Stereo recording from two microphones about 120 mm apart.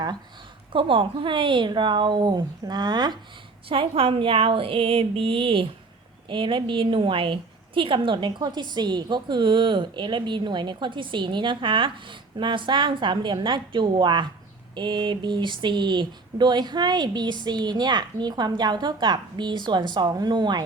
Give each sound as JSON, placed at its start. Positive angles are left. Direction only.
{"t": 0.7, "sound": "speech", "side_deg": -45}
{"t": 3.7, "sound": "a woman's voice", "side_deg": -50}